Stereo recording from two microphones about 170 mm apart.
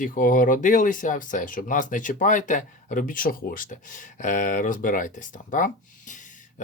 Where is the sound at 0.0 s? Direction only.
55° left (ahead or behind).